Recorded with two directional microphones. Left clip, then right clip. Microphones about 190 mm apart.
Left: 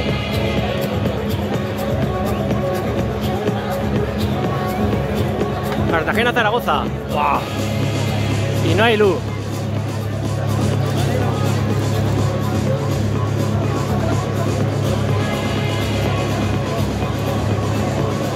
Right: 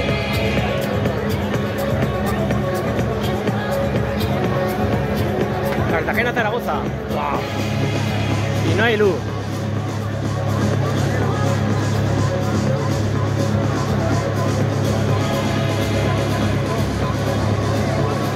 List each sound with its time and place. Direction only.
5.9 s speech: 20° left (ahead or behind)
8.7 s speech: 20° left (ahead or behind)